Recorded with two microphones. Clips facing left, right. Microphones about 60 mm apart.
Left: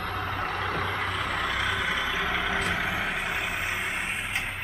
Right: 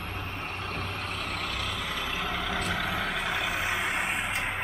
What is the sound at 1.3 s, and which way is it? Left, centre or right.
Vehicle, left.